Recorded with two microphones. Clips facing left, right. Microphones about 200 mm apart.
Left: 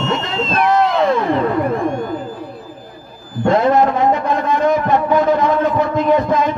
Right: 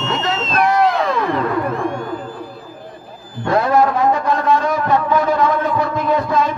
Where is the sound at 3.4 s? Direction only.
20° left (ahead or behind).